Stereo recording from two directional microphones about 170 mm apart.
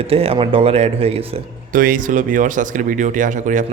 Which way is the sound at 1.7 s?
55° right (ahead or behind).